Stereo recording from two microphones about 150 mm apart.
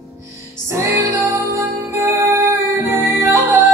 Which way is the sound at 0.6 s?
20° right (ahead or behind).